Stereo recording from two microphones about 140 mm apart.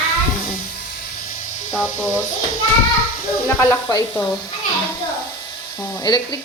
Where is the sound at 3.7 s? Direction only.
30° left (ahead or behind).